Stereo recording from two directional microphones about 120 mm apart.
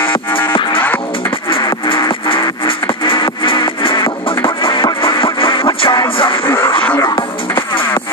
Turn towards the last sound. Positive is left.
turn(degrees=20)  # may be behind; listen again after turning